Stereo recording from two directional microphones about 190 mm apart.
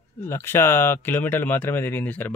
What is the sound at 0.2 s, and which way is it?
Speech, 15° left (ahead or behind).